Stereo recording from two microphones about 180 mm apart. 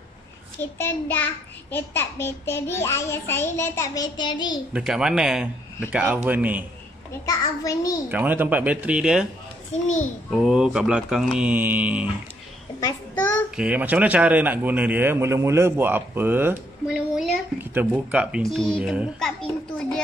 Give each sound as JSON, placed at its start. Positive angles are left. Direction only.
{"t": 0.6, "sound": "a child's voice", "side_deg": 10}
{"t": 4.7, "sound": "speech", "side_deg": -5}
{"t": 7.1, "sound": "a child's voice", "side_deg": 20}
{"t": 8.1, "sound": "a man's voice", "side_deg": -10}
{"t": 9.8, "sound": "a child's voice", "side_deg": 40}
{"t": 10.3, "sound": "speech", "side_deg": 0}
{"t": 13.1, "sound": "a child's voice", "side_deg": 10}
{"t": 13.6, "sound": "a man's voice", "side_deg": -10}